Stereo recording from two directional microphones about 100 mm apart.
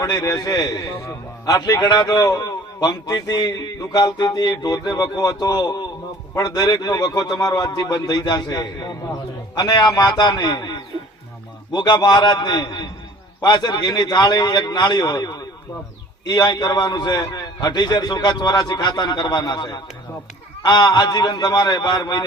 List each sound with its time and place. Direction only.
0.0 s a man's voice: 40° left (ahead or behind)